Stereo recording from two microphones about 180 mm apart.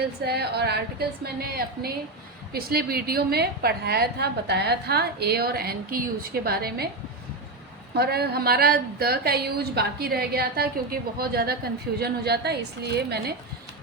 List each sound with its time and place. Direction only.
0.0 s a woman's voice: 65° right (ahead or behind)
7.9 s a woman's voice: 60° right (ahead or behind)